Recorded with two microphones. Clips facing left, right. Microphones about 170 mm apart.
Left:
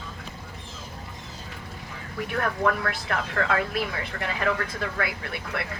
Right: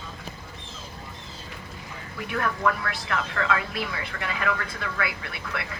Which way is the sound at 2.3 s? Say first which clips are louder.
Left 1 dB; 45° left (ahead or behind).